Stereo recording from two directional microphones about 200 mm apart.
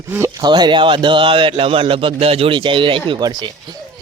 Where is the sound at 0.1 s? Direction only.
15° right (ahead or behind).